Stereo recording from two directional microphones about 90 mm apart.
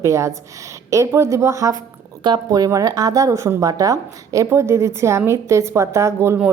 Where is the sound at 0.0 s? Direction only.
35° right (ahead or behind).